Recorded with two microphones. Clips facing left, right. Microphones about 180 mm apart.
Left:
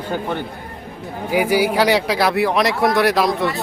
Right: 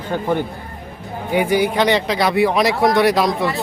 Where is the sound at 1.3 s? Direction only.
5° left (ahead or behind).